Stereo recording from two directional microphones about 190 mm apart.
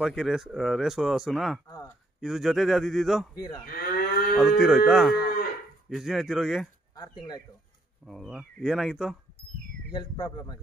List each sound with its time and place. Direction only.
0.0 s speech: 5° right (ahead or behind)
3.3 s speech: 20° left (ahead or behind)
3.6 s moo: 50° left (ahead or behind)
4.4 s speech: centre (ahead or behind)
7.0 s speech: 20° left (ahead or behind)
8.0 s speech: centre (ahead or behind)
9.8 s speech: 20° left (ahead or behind)